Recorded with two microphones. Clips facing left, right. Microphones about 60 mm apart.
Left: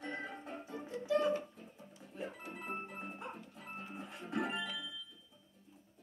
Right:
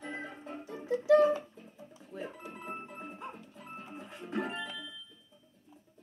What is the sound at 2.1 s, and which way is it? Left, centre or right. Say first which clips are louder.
Music: right 3 dB; right.